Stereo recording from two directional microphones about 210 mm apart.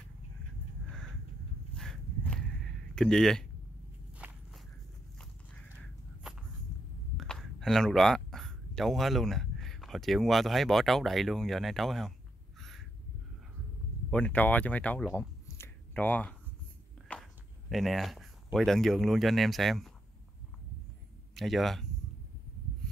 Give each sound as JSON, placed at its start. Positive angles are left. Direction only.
{"t": 1.8, "sound": "a sound", "side_deg": 5}
{"t": 4.2, "sound": "walk", "side_deg": -5}
{"t": 7.2, "sound": "speech", "side_deg": 0}
{"t": 12.5, "sound": "a sound", "side_deg": 0}
{"t": 14.1, "sound": "speech", "side_deg": 5}
{"t": 21.4, "sound": "speech", "side_deg": 0}